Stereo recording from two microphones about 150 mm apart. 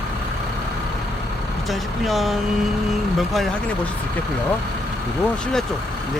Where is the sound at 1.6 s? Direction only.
Centre (ahead or behind).